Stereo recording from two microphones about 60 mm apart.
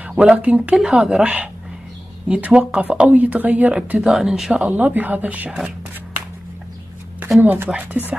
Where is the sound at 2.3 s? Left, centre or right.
Right.